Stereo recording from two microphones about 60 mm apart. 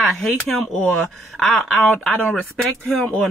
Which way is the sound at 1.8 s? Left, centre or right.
Left.